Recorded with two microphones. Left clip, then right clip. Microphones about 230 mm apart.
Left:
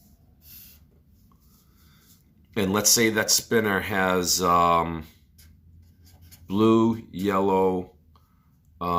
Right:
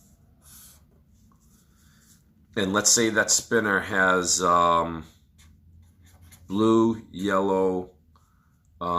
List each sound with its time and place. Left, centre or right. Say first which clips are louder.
2.5 s speech: even; left
6.5 s speech: left 1 dB; left